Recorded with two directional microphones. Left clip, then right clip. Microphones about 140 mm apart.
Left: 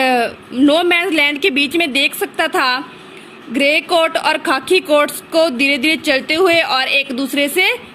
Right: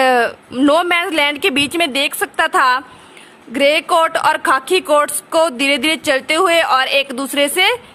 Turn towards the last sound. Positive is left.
turn(degrees=-60)  # may be behind; listen again after turning